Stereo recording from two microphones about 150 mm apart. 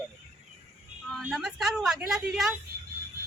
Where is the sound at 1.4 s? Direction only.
Centre (ahead or behind).